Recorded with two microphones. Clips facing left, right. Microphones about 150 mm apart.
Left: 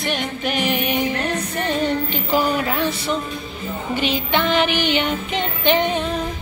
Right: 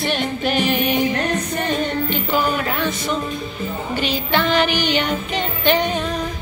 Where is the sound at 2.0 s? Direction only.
35° left (ahead or behind).